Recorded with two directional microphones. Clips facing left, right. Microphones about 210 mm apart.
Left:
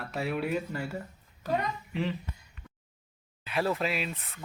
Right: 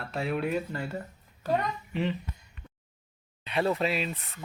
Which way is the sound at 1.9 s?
Centre (ahead or behind).